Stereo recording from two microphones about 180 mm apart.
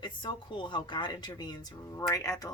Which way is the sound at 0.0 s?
25° left (ahead or behind).